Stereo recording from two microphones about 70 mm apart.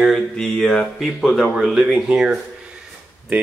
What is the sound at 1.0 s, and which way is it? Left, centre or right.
Speech, centre.